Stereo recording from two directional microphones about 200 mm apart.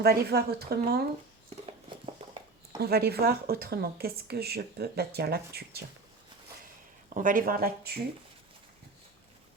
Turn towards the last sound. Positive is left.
turn(degrees=-50)  # may be behind; listen again after turning